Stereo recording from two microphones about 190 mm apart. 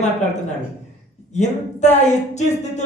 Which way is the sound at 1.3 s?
35° left (ahead or behind).